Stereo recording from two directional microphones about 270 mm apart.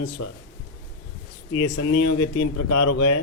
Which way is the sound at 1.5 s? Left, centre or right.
Left.